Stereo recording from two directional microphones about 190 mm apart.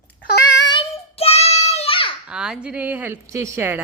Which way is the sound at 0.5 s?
25° left (ahead or behind).